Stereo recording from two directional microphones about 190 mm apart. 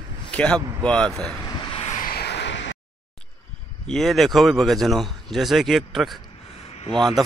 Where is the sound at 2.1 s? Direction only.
60° left (ahead or behind).